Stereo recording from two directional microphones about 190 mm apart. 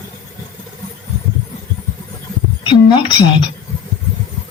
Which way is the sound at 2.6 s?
30° left (ahead or behind).